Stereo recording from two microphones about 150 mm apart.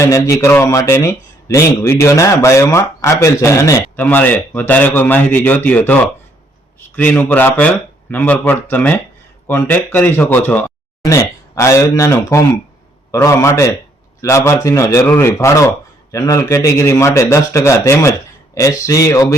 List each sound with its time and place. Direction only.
0.0 s a man's voice: 20° left (ahead or behind)